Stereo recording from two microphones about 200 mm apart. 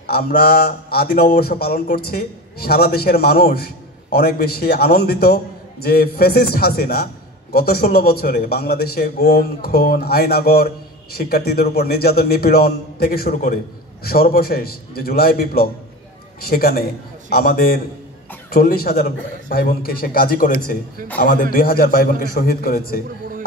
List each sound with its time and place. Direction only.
0.1 s a man's voice: 50° left (ahead or behind)